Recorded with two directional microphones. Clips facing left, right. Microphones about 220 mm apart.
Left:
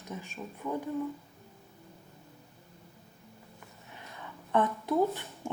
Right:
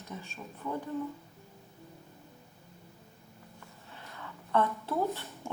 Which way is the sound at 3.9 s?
15° left (ahead or behind).